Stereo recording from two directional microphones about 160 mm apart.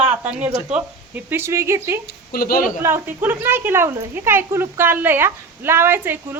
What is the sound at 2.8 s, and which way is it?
Speech, 15° right (ahead or behind).